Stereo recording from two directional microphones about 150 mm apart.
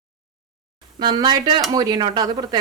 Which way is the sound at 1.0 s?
30° right (ahead or behind).